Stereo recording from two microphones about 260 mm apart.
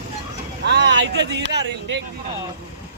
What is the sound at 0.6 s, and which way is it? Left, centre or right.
Speech, right.